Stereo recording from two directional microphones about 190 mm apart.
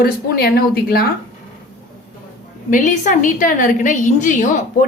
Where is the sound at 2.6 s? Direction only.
45° left (ahead or behind).